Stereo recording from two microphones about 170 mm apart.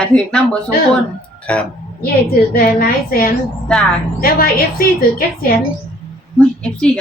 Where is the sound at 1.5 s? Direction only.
5° left (ahead or behind).